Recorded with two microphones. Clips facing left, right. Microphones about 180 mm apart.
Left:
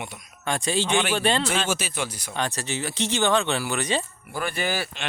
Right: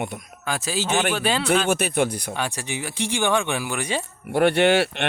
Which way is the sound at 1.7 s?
60° right (ahead or behind).